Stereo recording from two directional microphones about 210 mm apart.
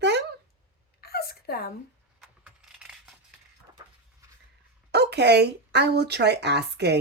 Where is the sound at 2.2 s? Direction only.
5° right (ahead or behind).